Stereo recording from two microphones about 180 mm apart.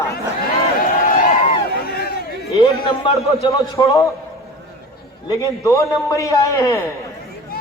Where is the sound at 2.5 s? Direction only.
30° left (ahead or behind).